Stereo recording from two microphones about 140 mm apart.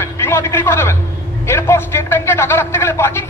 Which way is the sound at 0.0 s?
15° left (ahead or behind).